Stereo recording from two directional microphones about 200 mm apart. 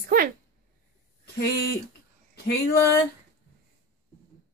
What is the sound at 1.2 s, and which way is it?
Speech, 55° left (ahead or behind).